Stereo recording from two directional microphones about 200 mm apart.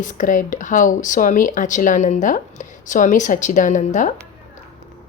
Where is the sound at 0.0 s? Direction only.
40° left (ahead or behind).